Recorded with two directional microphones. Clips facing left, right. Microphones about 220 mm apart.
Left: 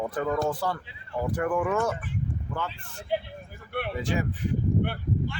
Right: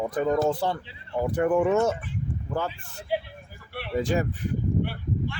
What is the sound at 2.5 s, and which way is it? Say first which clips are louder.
Speech: right 5 dB; 40° right (ahead or behind).